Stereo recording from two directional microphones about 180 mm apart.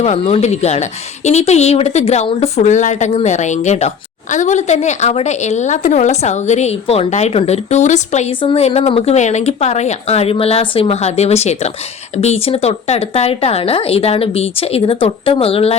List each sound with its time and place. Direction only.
0.0 s speech: 35° left (ahead or behind)